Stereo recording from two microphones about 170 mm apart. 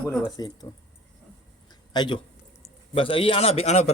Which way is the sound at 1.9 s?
25° left (ahead or behind).